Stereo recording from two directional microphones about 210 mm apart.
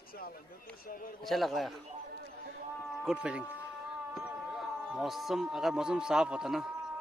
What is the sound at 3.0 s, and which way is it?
Speech, 5° right (ahead or behind).